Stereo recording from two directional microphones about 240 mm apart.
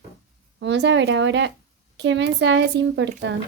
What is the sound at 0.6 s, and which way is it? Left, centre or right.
A woman's voice, right.